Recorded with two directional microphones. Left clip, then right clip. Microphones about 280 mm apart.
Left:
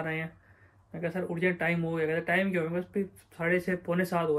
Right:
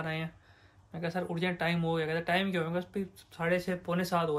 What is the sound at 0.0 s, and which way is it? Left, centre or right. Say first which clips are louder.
Speech: left 3 dB; centre.